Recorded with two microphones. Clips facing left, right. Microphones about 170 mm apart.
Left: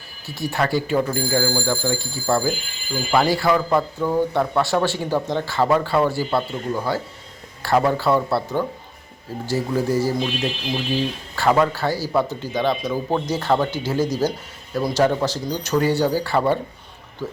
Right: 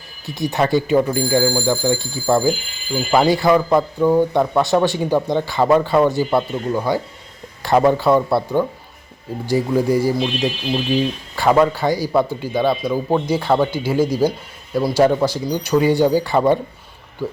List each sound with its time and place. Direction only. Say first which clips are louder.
0.3 s speech: right 4 dB; 20° right (ahead or behind)